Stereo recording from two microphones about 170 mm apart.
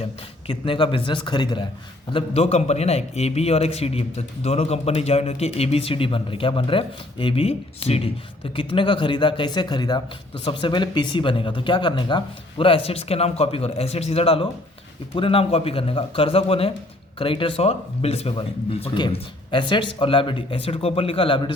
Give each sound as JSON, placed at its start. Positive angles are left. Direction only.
{"t": 0.0, "sound": "a man's voice", "side_deg": 30}